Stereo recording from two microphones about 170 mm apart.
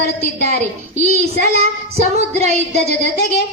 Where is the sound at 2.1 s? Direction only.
40° right (ahead or behind).